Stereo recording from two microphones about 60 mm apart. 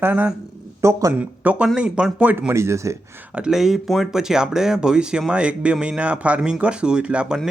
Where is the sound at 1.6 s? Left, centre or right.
Centre.